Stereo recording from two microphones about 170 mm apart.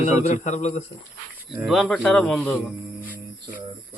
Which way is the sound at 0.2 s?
40° left (ahead or behind).